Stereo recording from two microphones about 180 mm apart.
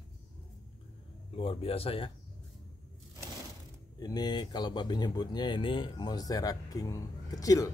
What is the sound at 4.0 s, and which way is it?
Speech, 20° left (ahead or behind).